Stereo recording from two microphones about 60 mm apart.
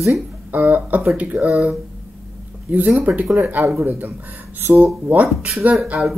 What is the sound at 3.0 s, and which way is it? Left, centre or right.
Speech, right.